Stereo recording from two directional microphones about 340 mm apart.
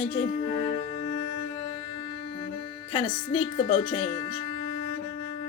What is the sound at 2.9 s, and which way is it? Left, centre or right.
Speech, centre.